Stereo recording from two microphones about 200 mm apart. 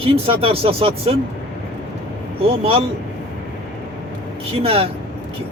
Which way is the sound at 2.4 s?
30° right (ahead or behind).